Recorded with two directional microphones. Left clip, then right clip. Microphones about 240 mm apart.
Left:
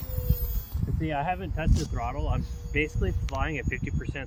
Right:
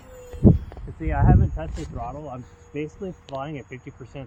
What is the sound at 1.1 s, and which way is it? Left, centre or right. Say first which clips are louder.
Speech: right 4 dB; centre.